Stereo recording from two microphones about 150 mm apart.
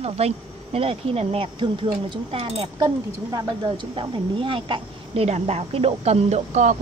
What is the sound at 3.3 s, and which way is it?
Speech, 30° right (ahead or behind).